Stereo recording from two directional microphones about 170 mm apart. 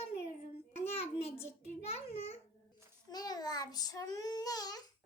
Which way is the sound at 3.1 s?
25° left (ahead or behind).